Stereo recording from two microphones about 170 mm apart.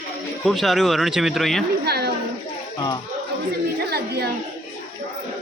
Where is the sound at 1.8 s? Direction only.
70° right (ahead or behind).